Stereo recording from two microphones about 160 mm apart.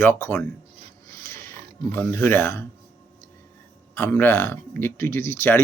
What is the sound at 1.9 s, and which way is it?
Speech, 15° left (ahead or behind).